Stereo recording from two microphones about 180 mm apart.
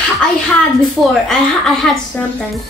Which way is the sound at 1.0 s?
Centre (ahead or behind).